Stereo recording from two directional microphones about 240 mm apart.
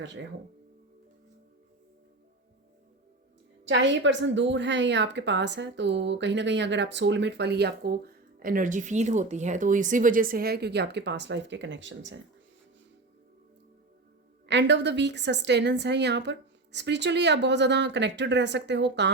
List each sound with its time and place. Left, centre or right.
3.7 s a woman's voice: right
14.4 s a woman's voice: right